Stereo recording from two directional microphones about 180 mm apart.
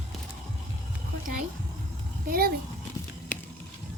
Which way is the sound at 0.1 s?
Centre (ahead or behind).